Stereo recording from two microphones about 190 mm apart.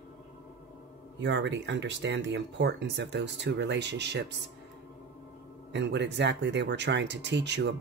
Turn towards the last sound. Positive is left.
turn(degrees=-65)  # may be behind; listen again after turning